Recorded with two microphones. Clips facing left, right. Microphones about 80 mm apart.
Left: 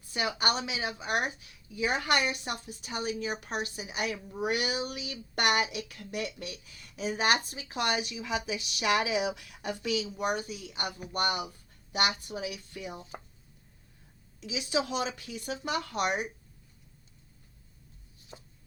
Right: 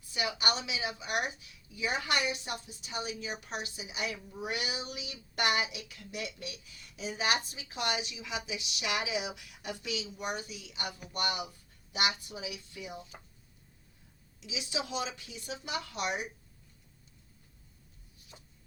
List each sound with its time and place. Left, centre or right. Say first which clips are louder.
0.1 s a woman's voice: left 3 dB; left
2.4 s a woman's voice: left 3 dB; left
13.0 s speech: left 4 dB; left
14.4 s a woman's voice: left 7 dB; left
18.3 s chopping: left 6 dB; left